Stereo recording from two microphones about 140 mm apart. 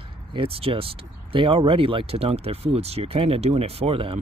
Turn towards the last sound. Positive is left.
turn(degrees=-45)  # may be behind; listen again after turning